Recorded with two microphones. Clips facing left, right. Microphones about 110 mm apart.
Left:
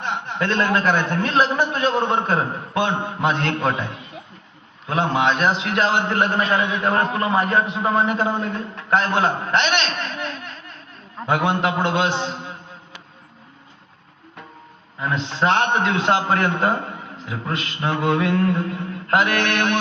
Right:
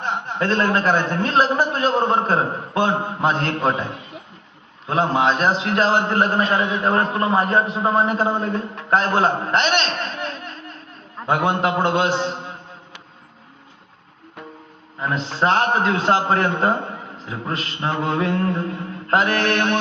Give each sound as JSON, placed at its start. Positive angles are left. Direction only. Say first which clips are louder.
{"t": 0.0, "sound": "a man's voice", "louder": "right 1 dB", "side_deg": -35}
{"t": 15.0, "sound": "a man's voice", "louder": "even", "side_deg": -35}